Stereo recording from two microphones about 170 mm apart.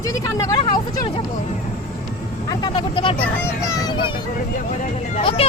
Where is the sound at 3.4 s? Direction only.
20° left (ahead or behind).